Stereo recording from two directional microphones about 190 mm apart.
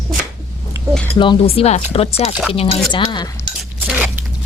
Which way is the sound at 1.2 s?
30° left (ahead or behind).